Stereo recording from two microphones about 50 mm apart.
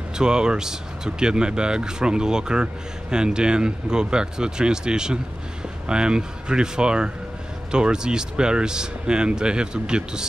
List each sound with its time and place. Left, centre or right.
0.2 s speech: centre